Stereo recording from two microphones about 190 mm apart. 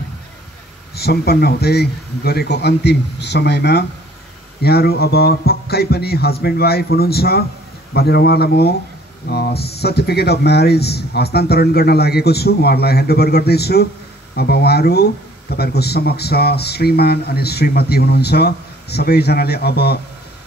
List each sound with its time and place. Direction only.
0.9 s speech: 55° left (ahead or behind)